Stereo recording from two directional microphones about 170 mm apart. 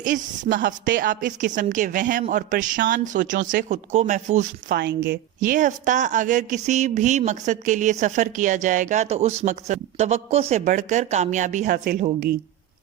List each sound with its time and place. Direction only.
0.0 s a woman's voice: 50° right (ahead or behind)
4.7 s a woman's voice: 85° right
5.4 s a woman's voice: 50° right (ahead or behind)